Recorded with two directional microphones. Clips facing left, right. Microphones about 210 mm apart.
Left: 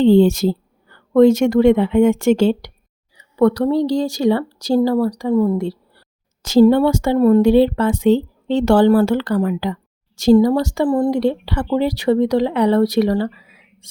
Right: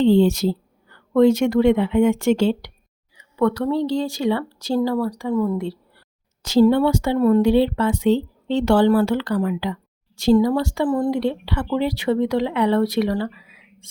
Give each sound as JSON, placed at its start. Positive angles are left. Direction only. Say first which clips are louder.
{"t": 0.0, "sound": "a woman's voice", "louder": "left 4 dB", "side_deg": 50}